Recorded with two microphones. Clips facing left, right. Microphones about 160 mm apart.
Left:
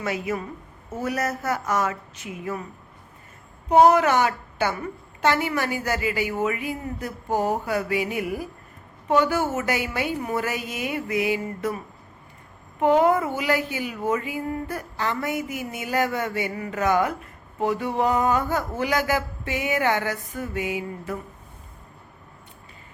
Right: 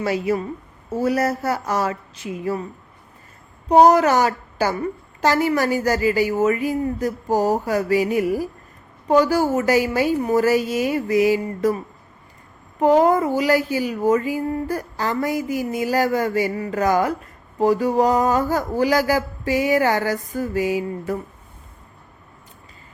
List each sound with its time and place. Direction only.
0.0 s speech: 35° right (ahead or behind)
3.7 s speech: 40° right (ahead or behind)
12.8 s speech: 35° right (ahead or behind)